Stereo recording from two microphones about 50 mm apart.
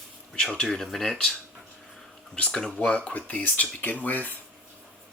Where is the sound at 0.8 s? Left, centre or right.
Centre; by 3.2 s left.